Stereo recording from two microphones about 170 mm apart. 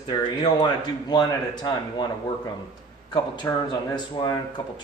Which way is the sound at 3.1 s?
25° left (ahead or behind).